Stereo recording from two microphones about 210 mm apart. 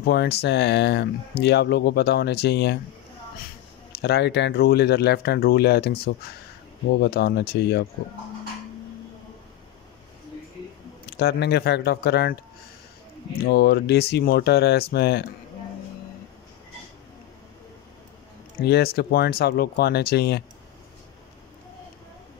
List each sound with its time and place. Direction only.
0.0 s speech: 50° left (ahead or behind)
4.0 s speech: 55° left (ahead or behind)
11.1 s speech: 50° left (ahead or behind)
13.4 s speech: 50° left (ahead or behind)
18.6 s speech: 50° left (ahead or behind)